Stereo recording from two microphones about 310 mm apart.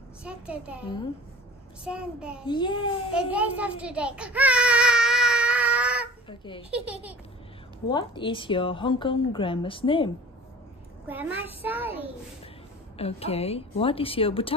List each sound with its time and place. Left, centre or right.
0.2 s a child's voice: centre
1.9 s a child's voice: centre
2.4 s a woman's voice: centre
3.2 s baby cry: centre
6.2 s a child's voice: centre
6.7 s a child's voice: centre
7.9 s a woman's voice: centre
11.1 s a child's voice: centre
12.9 s a woman's voice: centre